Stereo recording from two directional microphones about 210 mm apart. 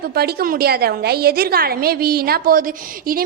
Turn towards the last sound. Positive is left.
turn(degrees=-45)  # may be behind; listen again after turning